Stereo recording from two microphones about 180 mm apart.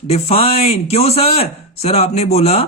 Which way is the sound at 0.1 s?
35° left (ahead or behind).